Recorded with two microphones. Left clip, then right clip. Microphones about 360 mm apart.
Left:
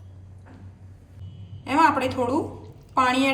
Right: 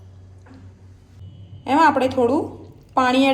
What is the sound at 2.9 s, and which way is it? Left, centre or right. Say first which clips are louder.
Speech: right 3 dB; centre.